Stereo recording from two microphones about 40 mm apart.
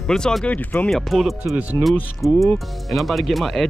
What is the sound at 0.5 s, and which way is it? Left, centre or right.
Speech, left.